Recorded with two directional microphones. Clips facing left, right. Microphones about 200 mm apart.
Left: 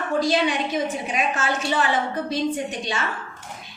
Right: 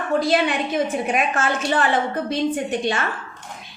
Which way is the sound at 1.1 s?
55° right (ahead or behind).